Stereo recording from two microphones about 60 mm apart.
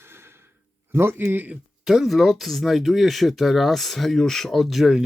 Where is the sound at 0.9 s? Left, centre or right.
Right.